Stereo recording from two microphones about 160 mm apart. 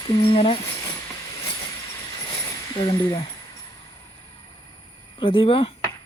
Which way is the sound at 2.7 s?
30° left (ahead or behind).